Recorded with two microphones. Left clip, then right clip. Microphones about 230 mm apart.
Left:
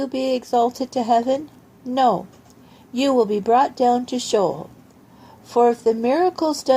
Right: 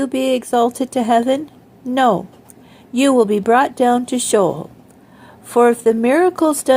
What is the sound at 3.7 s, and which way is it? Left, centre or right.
Speech, right.